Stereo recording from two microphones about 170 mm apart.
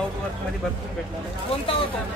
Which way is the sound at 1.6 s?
30° left (ahead or behind).